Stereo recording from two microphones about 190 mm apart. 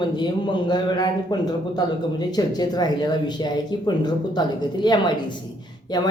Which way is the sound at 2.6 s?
20° left (ahead or behind).